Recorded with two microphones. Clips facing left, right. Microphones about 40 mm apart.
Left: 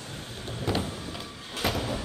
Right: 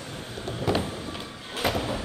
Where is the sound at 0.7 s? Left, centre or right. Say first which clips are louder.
Right 3 dB; centre.